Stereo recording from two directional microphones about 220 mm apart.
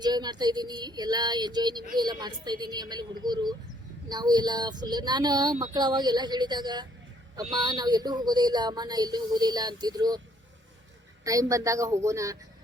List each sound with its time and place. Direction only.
0.0 s a woman's voice: 20° right (ahead or behind)
11.2 s a woman's voice: 15° right (ahead or behind)